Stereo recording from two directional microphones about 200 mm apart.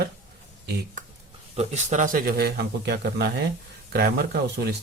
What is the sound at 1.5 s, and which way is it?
Speech, 35° right (ahead or behind).